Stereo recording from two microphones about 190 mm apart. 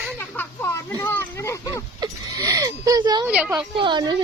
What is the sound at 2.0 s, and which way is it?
Speech, 15° right (ahead or behind).